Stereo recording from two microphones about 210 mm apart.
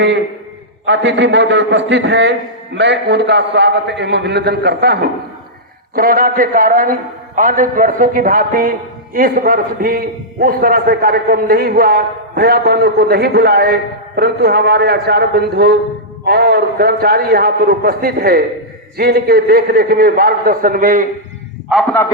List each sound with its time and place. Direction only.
0.9 s a man's voice: 60° right (ahead or behind); by 21.1 s 40° right (ahead or behind)
21.7 s a man's voice: centre (ahead or behind)